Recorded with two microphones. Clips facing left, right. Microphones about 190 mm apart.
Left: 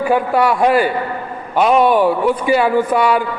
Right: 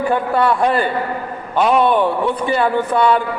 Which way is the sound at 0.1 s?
10° left (ahead or behind).